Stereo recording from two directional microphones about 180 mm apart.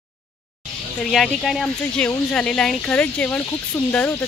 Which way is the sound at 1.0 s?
5° left (ahead or behind).